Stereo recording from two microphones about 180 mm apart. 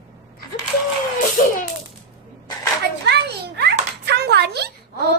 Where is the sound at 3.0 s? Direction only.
65° right (ahead or behind).